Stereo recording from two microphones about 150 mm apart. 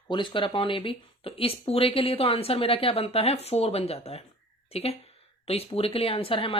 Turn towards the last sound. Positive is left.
turn(degrees=35)  # may be behind; listen again after turning